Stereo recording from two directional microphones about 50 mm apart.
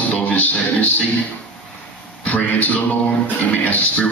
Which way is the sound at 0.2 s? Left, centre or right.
Left.